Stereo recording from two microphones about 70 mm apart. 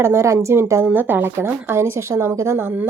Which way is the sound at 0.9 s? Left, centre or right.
Right.